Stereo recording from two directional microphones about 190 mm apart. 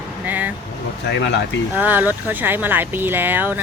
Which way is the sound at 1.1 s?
65° left (ahead or behind).